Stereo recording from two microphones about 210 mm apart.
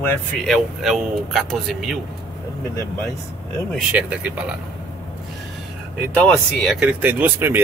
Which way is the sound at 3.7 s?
5° right (ahead or behind).